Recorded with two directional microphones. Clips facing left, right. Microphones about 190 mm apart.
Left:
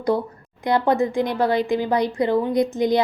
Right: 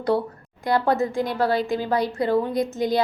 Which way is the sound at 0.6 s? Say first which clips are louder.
Left 2 dB; 20° left (ahead or behind).